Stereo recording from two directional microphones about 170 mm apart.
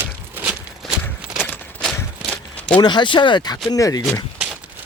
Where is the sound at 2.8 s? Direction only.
25° left (ahead or behind).